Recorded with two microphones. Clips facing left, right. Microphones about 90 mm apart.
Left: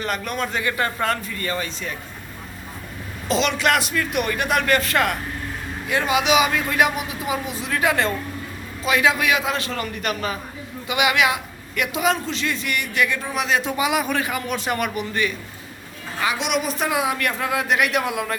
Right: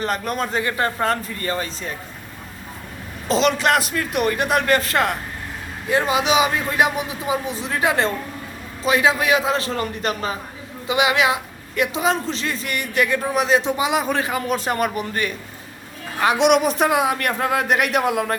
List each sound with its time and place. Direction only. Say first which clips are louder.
0.0 s a man's voice: right 2 dB; 35° right (ahead or behind)
3.2 s a man's voice: right 2 dB; 35° right (ahead or behind)
16.2 s a man's voice: right 7 dB; 60° right (ahead or behind)